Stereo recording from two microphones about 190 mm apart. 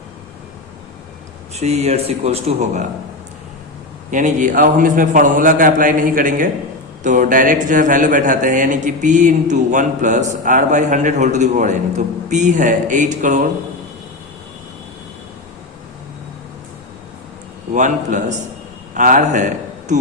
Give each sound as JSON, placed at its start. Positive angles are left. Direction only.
{"t": 1.5, "sound": "speech", "side_deg": -35}
{"t": 4.1, "sound": "a man's voice", "side_deg": -40}
{"t": 17.7, "sound": "a man's voice", "side_deg": -40}